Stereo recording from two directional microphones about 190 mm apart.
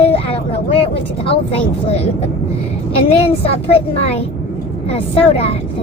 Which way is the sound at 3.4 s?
30° left (ahead or behind).